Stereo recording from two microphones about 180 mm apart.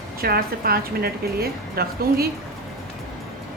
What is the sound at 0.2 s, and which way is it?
A woman's voice, 55° right (ahead or behind).